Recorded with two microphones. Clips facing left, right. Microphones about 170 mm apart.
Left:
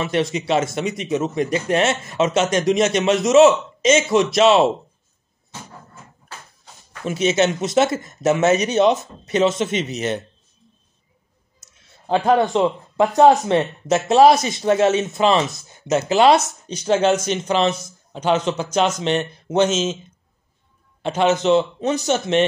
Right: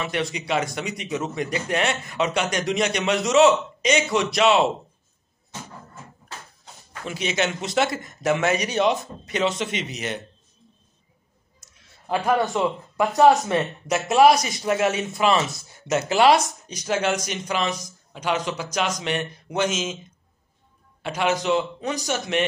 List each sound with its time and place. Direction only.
0.0 s speech: 25° left (ahead or behind)
7.1 s speech: 20° left (ahead or behind)
12.1 s speech: 25° left (ahead or behind)
21.0 s speech: 25° left (ahead or behind)